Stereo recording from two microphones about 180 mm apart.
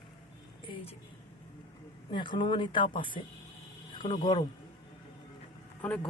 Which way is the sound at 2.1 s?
25° left (ahead or behind).